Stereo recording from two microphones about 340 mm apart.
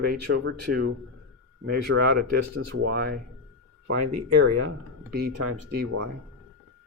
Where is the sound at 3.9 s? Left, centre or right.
Right.